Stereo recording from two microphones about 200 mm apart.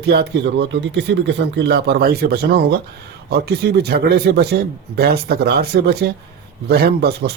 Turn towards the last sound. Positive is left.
turn(degrees=-55)  # may be behind; listen again after turning